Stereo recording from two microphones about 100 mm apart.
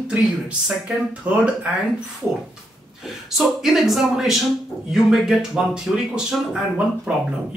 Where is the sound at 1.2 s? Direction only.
15° right (ahead or behind).